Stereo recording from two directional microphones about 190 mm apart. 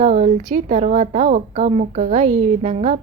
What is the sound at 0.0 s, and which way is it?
A woman's voice, 35° right (ahead or behind).